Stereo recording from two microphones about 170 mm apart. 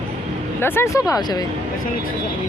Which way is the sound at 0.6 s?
15° left (ahead or behind).